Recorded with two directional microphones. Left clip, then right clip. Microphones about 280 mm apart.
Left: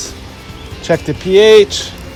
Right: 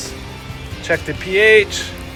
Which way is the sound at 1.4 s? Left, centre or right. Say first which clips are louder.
Left 5 dB; centre.